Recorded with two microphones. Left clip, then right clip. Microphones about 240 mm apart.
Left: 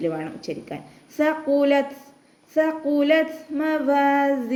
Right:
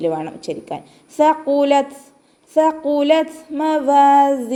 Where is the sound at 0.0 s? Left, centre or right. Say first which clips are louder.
Right 6 dB; centre.